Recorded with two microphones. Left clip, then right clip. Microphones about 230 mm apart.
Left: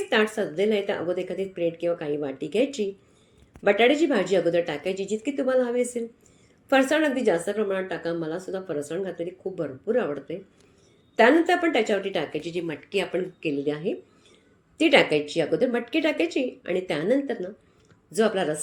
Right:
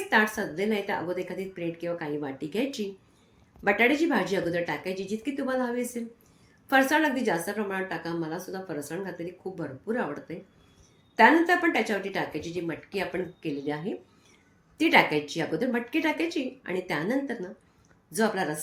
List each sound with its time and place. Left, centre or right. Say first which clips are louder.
0.1 s a woman's voice: even; centre
12.4 s speech: left 3 dB; centre
13.4 s a woman's voice: left 5 dB; centre